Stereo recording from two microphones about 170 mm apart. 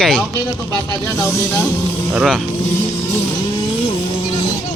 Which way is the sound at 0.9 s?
20° left (ahead or behind).